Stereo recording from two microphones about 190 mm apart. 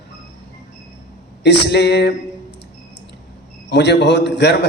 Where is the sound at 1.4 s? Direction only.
65° left (ahead or behind).